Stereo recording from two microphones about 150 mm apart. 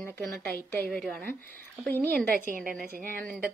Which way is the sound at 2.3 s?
60° right (ahead or behind).